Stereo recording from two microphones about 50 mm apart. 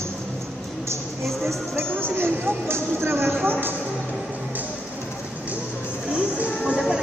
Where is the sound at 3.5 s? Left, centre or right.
Right.